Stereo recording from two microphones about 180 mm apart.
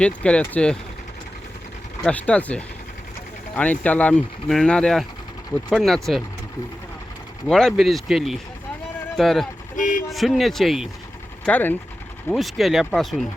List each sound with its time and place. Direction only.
0.0 s speech: 5° left (ahead or behind)
2.0 s speech: 5° left (ahead or behind)
7.4 s speech: 5° left (ahead or behind)
9.7 s speech: 45° left (ahead or behind)
10.1 s speech: centre (ahead or behind)